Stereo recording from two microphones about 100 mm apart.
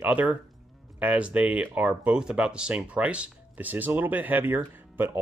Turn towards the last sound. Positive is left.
turn(degrees=-20)  # may be behind; listen again after turning